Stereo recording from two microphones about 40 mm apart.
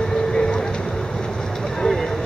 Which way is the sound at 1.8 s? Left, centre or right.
Centre.